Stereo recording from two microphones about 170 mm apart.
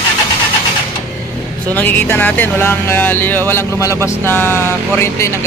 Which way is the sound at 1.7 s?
10° left (ahead or behind).